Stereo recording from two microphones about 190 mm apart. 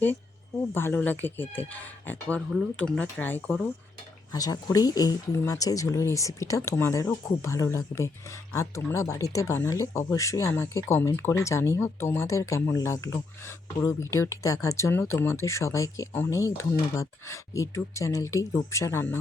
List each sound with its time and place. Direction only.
0.0 s speech: 10° left (ahead or behind)
4.3 s speech: 20° left (ahead or behind)